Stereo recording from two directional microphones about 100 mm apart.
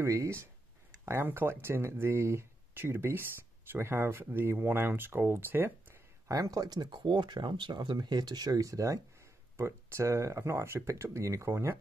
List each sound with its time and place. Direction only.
0.0 s speech: 30° right (ahead or behind)